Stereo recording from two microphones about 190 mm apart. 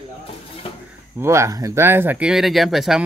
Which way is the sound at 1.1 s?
15° right (ahead or behind).